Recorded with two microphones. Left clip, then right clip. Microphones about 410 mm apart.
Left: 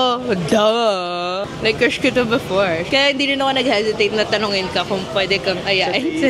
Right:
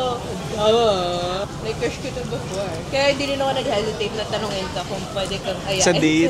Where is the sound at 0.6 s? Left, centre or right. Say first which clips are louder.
Even; left.